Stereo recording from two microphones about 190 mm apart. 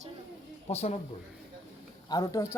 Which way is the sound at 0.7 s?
35° left (ahead or behind).